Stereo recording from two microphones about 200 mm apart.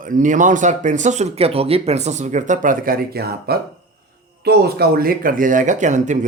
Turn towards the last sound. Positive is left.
turn(degrees=-35)  # may be behind; listen again after turning